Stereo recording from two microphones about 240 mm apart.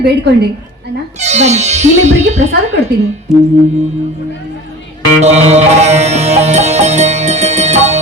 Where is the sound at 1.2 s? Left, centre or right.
Right.